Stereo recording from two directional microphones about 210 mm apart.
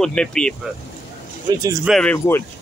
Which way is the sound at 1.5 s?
20° right (ahead or behind).